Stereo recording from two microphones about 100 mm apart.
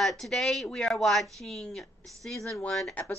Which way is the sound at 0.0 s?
5° left (ahead or behind).